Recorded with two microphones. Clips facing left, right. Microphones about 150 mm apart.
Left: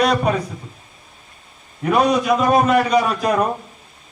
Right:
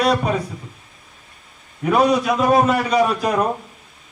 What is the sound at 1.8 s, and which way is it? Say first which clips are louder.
A man's voice: even; 5° right (ahead or behind).